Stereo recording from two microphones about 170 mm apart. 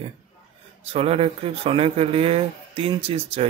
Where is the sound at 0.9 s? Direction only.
35° right (ahead or behind).